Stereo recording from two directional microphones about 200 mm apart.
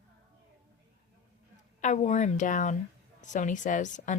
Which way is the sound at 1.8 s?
35° left (ahead or behind).